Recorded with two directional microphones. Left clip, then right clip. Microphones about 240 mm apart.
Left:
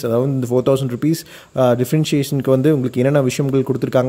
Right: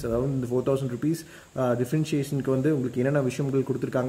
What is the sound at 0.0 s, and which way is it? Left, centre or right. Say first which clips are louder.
Speech: left 9 dB; left.